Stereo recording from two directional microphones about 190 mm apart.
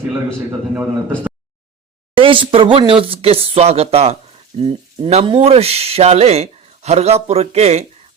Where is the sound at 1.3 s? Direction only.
5° right (ahead or behind).